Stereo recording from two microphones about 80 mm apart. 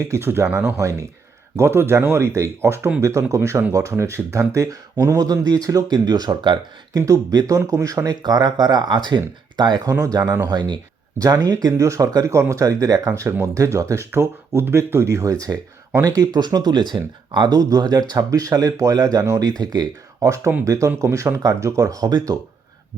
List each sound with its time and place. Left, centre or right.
0.1 s speech: right
6.9 s speech: right
8.0 s speech: right
10.0 s speech: right
10.4 s speech: right
17.6 s speech: right
19.5 s speech: right
20.7 s speech: right